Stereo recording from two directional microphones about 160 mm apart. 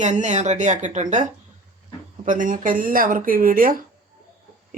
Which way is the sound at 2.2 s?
55° right (ahead or behind).